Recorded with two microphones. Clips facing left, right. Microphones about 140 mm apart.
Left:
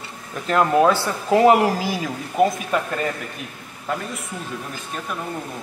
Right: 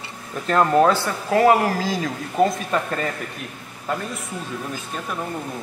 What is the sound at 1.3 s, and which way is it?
Speech, 20° left (ahead or behind).